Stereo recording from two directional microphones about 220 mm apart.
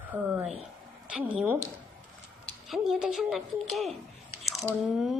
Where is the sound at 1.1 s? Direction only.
5° right (ahead or behind).